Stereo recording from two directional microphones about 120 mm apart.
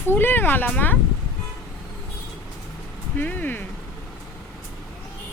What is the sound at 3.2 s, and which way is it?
Speech, 15° left (ahead or behind).